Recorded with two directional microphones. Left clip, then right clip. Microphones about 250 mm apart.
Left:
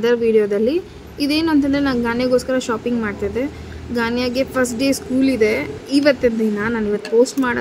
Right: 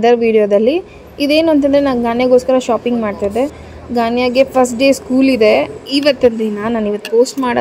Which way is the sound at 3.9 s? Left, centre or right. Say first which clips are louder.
Right 7 dB; centre.